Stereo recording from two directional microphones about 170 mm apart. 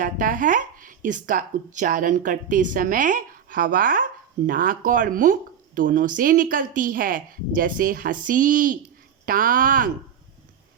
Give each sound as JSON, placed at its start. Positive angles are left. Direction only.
{"t": 0.0, "sound": "speech", "side_deg": -55}